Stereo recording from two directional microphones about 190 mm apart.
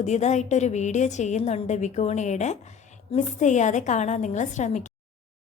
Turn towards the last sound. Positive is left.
turn(degrees=40)  # may be behind; listen again after turning